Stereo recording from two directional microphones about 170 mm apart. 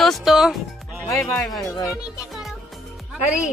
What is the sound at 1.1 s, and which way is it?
Speech, centre (ahead or behind).